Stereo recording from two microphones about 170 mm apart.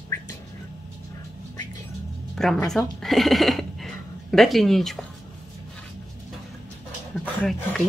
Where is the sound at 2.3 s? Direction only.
Centre (ahead or behind).